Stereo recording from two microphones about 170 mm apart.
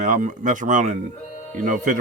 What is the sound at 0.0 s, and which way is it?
Speech, 50° right (ahead or behind).